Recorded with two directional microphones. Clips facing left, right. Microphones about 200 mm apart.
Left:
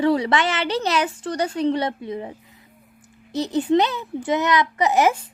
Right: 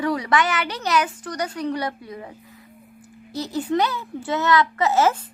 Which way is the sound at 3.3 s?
20° left (ahead or behind).